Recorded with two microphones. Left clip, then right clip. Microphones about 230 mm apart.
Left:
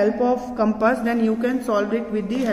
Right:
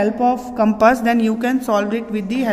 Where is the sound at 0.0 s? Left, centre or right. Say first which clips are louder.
Right 2 dB; right.